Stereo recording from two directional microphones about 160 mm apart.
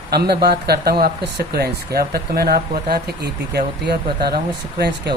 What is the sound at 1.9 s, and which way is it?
Speech, 75° right (ahead or behind).